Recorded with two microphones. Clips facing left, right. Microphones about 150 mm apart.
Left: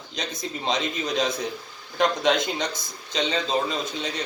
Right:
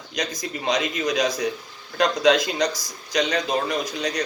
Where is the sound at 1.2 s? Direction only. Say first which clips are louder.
Right 2 dB; 25° left (ahead or behind).